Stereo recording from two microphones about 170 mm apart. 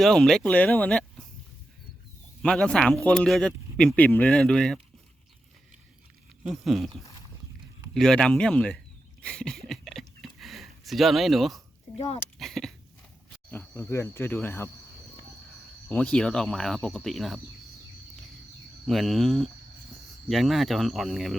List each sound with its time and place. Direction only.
0.0 s speech: 5° left (ahead or behind)
2.4 s speech: 5° left (ahead or behind)
6.4 s speech: centre (ahead or behind)
7.9 s speech: 5° left (ahead or behind)
9.2 s a sound: 5° left (ahead or behind)
11.9 s speech: 35° left (ahead or behind)
12.4 s speech: centre (ahead or behind)
13.5 s speech: 10° left (ahead or behind)
15.9 s speech: 10° left (ahead or behind)
18.9 s speech: centre (ahead or behind)